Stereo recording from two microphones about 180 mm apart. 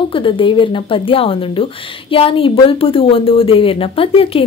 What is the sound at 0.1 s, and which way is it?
A woman's voice, 30° left (ahead or behind).